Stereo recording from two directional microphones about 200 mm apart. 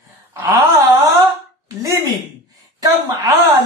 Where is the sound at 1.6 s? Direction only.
15° right (ahead or behind).